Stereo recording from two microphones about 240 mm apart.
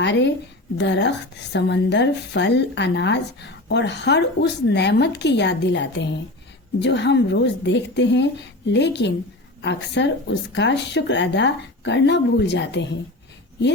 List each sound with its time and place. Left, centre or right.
0.0 s a woman's voice: left